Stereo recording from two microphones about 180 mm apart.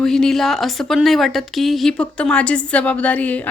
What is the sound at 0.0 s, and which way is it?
A woman's voice, 5° left (ahead or behind).